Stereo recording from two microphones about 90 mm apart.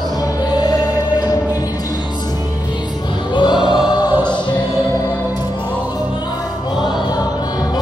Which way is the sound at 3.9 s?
55° left (ahead or behind).